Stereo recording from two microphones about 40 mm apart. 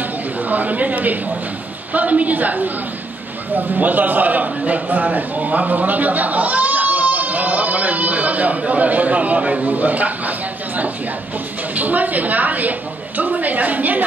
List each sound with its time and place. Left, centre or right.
0.5 s a woman's voice: right
11.7 s a woman's voice: right